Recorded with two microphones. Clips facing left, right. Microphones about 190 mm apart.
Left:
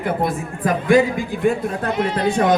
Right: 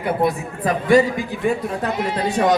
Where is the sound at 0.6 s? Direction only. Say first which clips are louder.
Even; 50° left (ahead or behind).